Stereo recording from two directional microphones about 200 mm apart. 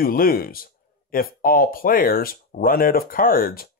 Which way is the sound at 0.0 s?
45° left (ahead or behind).